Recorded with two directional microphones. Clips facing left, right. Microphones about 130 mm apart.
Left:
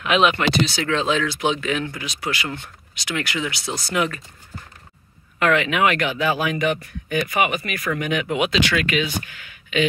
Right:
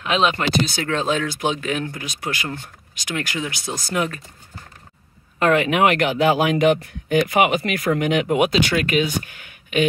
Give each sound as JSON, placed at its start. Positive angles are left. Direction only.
{"t": 0.0, "sound": "speech", "side_deg": -30}
{"t": 0.7, "sound": "speech", "side_deg": -45}
{"t": 5.4, "sound": "speech", "side_deg": -45}